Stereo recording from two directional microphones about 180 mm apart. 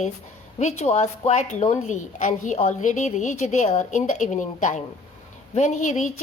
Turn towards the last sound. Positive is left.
turn(degrees=40)  # may be behind; listen again after turning